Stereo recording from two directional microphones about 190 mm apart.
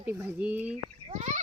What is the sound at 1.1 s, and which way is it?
Speech, 40° right (ahead or behind).